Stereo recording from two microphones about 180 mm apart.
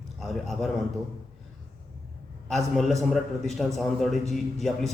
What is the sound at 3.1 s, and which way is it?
A man's voice, centre (ahead or behind).